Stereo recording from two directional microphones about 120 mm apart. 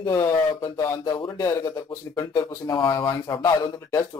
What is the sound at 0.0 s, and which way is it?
Speech, 25° left (ahead or behind).